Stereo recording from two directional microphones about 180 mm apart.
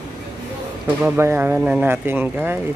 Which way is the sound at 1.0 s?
15° right (ahead or behind).